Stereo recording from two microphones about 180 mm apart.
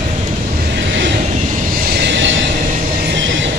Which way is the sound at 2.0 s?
90° right.